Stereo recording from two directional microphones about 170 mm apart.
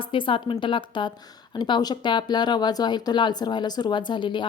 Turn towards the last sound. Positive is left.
turn(degrees=30)  # may be behind; listen again after turning